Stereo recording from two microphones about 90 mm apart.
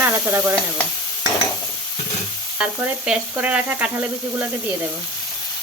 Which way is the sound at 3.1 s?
15° right (ahead or behind).